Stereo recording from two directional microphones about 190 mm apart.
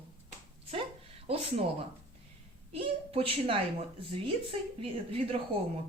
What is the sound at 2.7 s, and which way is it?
Speech, 30° right (ahead or behind).